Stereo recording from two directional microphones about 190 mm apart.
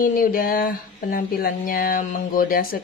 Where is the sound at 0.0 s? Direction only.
45° left (ahead or behind).